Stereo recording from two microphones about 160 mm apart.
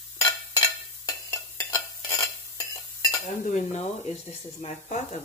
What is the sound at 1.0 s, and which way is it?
Stir, 20° left (ahead or behind).